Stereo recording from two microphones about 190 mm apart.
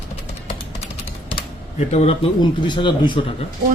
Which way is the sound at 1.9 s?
30° left (ahead or behind).